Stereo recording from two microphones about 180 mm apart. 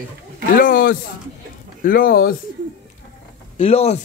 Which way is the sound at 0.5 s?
50° left (ahead or behind).